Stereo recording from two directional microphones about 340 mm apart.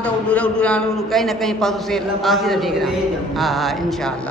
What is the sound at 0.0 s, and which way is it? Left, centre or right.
A man's voice, centre.